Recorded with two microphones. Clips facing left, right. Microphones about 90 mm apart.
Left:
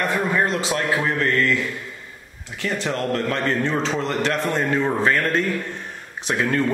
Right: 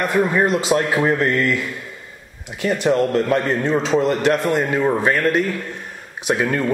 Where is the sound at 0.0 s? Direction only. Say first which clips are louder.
Right 4 dB; 15° right (ahead or behind).